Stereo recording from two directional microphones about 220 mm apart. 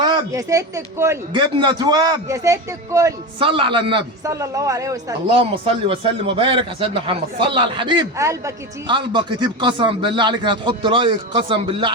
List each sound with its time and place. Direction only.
0.0 s speech: 20° right (ahead or behind)